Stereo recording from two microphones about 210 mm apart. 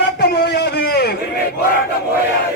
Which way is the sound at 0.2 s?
50° left (ahead or behind).